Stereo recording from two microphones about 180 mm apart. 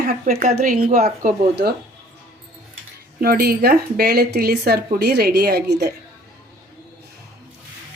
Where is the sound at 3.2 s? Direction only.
55° right (ahead or behind).